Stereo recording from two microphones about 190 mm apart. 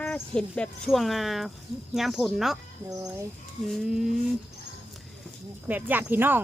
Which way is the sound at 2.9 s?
15° right (ahead or behind).